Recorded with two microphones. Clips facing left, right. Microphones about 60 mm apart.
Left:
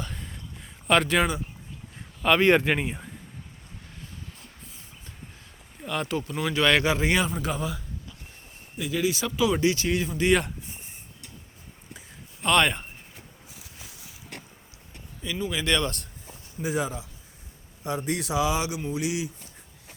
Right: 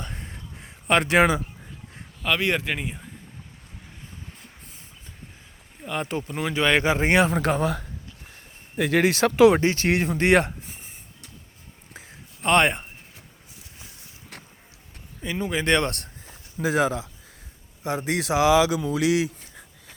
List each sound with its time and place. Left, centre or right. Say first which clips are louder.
0.0 s crow: even; right
1.2 s speech: right 6 dB; right
2.2 s speech: left 4 dB; centre
5.8 s speech: even; centre; by 7.3 s right
7.3 s speech: right 7 dB; right
9.6 s speech: right 2 dB; right
11.9 s a sound: right 2 dB; right
15.2 s speech: right 3 dB; right
16.6 s speech: right 6 dB; right
18.0 s speech: right 5 dB; right